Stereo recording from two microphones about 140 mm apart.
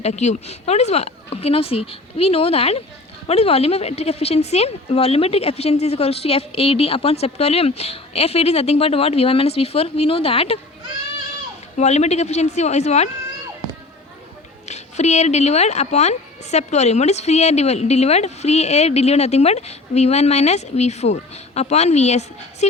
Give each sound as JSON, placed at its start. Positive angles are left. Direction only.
{"t": 0.0, "sound": "a woman's voice", "side_deg": 55}
{"t": 11.8, "sound": "a woman's voice", "side_deg": 50}
{"t": 14.7, "sound": "a woman's voice", "side_deg": 55}